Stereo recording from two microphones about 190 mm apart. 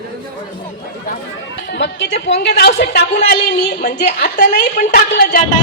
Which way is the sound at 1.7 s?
70° left (ahead or behind).